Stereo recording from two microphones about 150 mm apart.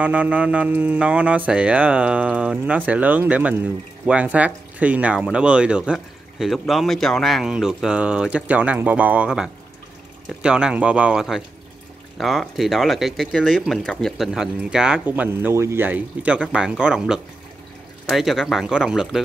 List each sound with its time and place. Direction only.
0.0 s speech: 10° right (ahead or behind)